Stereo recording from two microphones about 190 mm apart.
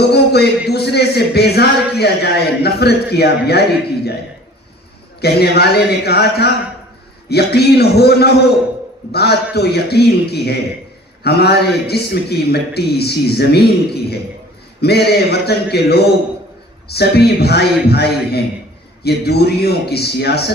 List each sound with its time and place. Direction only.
0.1 s speech: 60° left (ahead or behind)
5.2 s speech: 60° left (ahead or behind)